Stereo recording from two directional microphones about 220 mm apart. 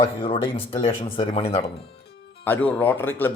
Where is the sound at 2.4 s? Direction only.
5° left (ahead or behind).